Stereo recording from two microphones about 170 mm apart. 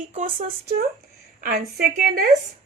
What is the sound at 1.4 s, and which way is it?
Speech, 60° right (ahead or behind).